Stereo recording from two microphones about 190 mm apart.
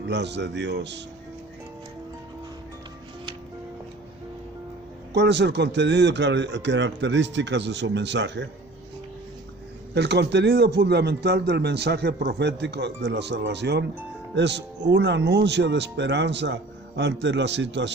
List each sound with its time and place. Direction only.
0.1 s a man's voice: 65° right (ahead or behind)
5.1 s speech: 65° right (ahead or behind)
9.9 s a man's voice: 60° right (ahead or behind)